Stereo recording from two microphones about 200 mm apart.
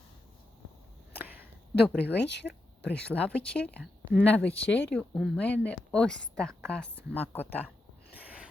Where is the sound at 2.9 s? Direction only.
5° left (ahead or behind).